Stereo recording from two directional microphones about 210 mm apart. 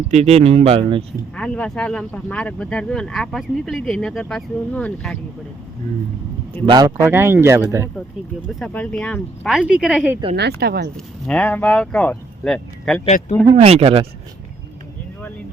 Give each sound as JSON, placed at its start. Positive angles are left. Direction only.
{"t": 0.1, "sound": "speech", "side_deg": -30}
{"t": 1.4, "sound": "speech", "side_deg": 5}
{"t": 6.7, "sound": "speech", "side_deg": -15}
{"t": 8.5, "sound": "speech", "side_deg": 5}
{"t": 10.3, "sound": "speech", "side_deg": -50}
{"t": 10.9, "sound": "speech", "side_deg": 5}
{"t": 13.1, "sound": "speech", "side_deg": 35}
{"t": 13.4, "sound": "speech", "side_deg": -25}